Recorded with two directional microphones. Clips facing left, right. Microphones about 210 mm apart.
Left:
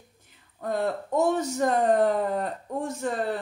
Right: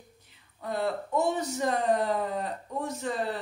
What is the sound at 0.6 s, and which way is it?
Speech, 45° left (ahead or behind).